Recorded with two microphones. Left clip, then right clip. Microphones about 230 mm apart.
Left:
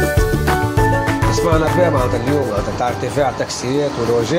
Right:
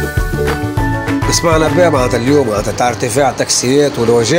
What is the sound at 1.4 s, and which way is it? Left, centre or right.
Music, right.